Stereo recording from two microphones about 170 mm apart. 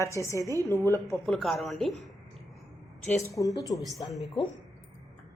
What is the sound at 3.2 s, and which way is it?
Speech, 20° left (ahead or behind).